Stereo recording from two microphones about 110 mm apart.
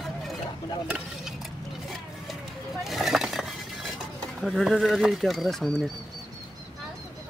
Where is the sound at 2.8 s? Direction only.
Centre (ahead or behind).